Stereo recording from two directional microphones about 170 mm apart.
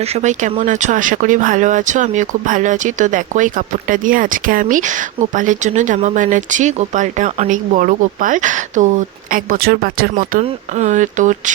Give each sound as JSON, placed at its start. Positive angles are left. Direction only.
{"t": 0.0, "sound": "speech", "side_deg": -40}
{"t": 10.4, "sound": "speech", "side_deg": -45}